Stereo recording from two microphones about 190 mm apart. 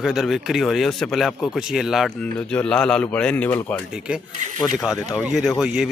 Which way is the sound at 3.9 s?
5° right (ahead or behind).